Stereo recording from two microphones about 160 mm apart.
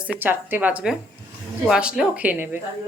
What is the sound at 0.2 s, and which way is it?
Speech, 10° right (ahead or behind).